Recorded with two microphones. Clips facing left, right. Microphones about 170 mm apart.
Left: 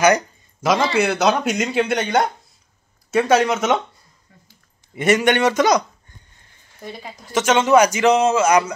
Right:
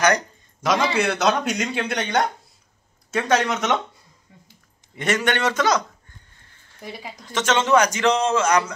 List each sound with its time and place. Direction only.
0.0 s a sound: 5° left (ahead or behind)
0.9 s speech: 5° left (ahead or behind)
4.3 s a sound: 20° right (ahead or behind)
4.9 s a man's voice: 10° left (ahead or behind)
6.8 s a woman's voice: 10° right (ahead or behind)
7.2 s a man's voice: 10° left (ahead or behind)